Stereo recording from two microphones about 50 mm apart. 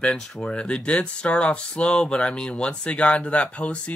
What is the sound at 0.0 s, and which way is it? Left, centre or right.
Speech, centre.